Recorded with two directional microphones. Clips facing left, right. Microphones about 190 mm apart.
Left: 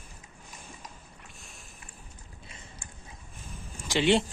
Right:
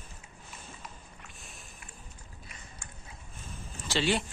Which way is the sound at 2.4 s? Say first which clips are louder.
Left 2 dB; 30° left (ahead or behind).